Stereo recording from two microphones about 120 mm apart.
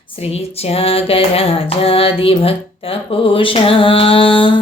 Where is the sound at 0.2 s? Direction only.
60° left (ahead or behind).